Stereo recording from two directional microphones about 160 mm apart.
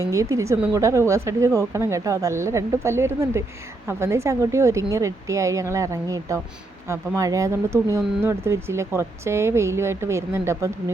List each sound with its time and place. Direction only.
0.0 s speech: 20° right (ahead or behind)